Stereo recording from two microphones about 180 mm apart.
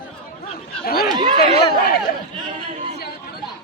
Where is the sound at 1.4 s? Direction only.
55° left (ahead or behind).